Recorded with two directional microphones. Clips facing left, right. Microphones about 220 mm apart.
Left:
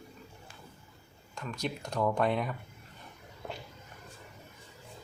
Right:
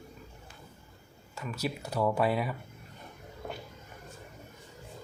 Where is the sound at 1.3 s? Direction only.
5° right (ahead or behind).